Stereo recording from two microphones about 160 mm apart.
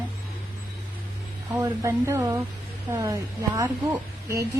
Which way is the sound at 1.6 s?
20° right (ahead or behind).